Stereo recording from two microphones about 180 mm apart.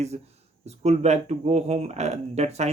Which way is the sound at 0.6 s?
35° right (ahead or behind).